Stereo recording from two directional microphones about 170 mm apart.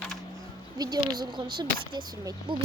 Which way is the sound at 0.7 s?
25° right (ahead or behind).